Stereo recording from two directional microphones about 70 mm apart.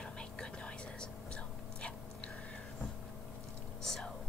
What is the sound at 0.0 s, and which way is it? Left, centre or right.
Whispering, centre.